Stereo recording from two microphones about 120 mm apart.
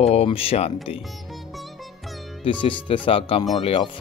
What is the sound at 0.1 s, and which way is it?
Speech, 55° left (ahead or behind).